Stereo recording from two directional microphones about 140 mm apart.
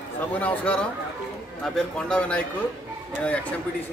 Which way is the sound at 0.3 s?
10° left (ahead or behind).